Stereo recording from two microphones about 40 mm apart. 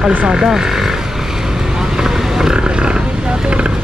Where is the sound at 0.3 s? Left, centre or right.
Centre.